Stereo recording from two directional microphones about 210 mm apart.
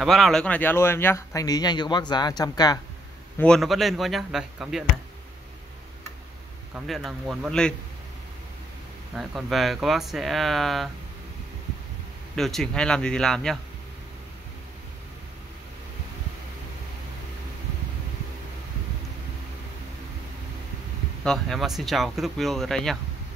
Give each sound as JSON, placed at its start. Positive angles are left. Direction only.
{"t": 0.0, "sound": "speech", "side_deg": 0}
{"t": 3.3, "sound": "speech", "side_deg": 5}
{"t": 6.7, "sound": "speech", "side_deg": 0}
{"t": 9.1, "sound": "speech", "side_deg": 0}
{"t": 12.4, "sound": "speech", "side_deg": 0}
{"t": 21.2, "sound": "speech", "side_deg": 0}